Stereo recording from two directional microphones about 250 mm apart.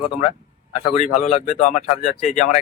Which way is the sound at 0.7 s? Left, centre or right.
Left.